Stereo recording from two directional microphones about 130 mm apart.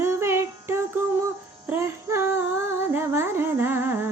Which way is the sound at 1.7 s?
20° right (ahead or behind).